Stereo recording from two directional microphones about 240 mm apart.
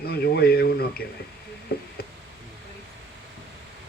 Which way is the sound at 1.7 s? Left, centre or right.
Left.